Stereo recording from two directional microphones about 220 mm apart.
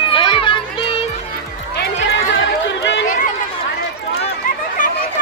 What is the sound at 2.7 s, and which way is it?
Run, 55° left (ahead or behind).